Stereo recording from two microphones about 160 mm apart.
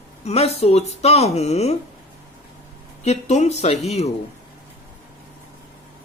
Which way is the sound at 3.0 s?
45° left (ahead or behind).